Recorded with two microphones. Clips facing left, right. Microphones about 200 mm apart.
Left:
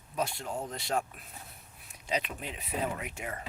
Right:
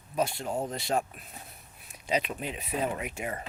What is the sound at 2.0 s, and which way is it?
Speech, 5° right (ahead or behind).